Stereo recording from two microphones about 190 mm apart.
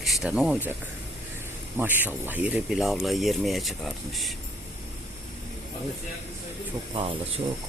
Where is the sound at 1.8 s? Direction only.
10° right (ahead or behind).